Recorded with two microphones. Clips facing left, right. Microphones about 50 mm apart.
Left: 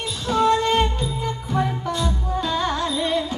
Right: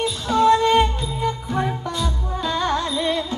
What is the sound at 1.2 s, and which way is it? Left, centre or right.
Music, centre.